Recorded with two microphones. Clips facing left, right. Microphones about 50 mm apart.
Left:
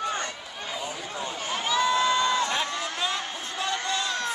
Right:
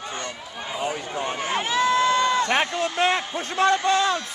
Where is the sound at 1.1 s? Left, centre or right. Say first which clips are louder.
Right 4 dB; right.